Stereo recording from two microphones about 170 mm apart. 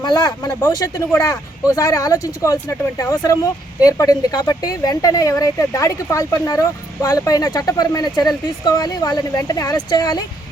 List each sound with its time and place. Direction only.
0.0 s speech: 25° left (ahead or behind)